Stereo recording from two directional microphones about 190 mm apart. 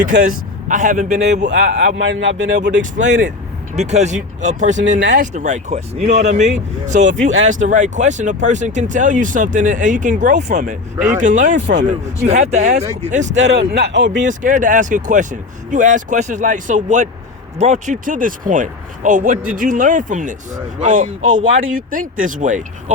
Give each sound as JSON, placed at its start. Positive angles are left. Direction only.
{"t": 0.0, "sound": "speech", "side_deg": -40}
{"t": 1.2, "sound": "speech", "side_deg": -65}
{"t": 1.5, "sound": "speech", "side_deg": -40}
{"t": 2.0, "sound": "speech", "side_deg": -80}
{"t": 2.9, "sound": "speech", "side_deg": -40}
{"t": 10.9, "sound": "speech", "side_deg": -10}
{"t": 11.2, "sound": "speech", "side_deg": -40}
{"t": 13.5, "sound": "speech", "side_deg": -60}
{"t": 14.3, "sound": "speech", "side_deg": -40}